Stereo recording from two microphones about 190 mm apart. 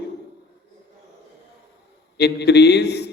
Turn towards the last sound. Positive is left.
turn(degrees=60)  # may be behind; listen again after turning